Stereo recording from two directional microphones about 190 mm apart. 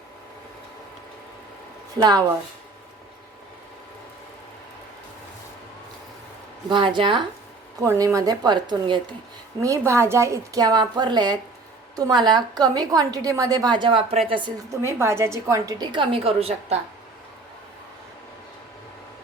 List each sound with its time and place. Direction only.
2.0 s a woman's voice: 20° right (ahead or behind)
6.7 s a woman's voice: 25° right (ahead or behind)